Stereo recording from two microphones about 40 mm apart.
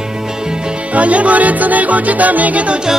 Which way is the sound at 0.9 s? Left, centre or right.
Right.